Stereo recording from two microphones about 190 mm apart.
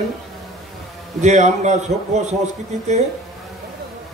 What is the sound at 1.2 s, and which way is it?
A man's voice, 40° right (ahead or behind).